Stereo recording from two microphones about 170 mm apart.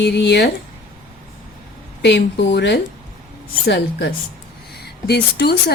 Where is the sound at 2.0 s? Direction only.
90° left.